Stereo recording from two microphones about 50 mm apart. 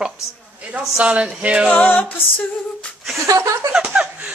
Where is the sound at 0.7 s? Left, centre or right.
Right.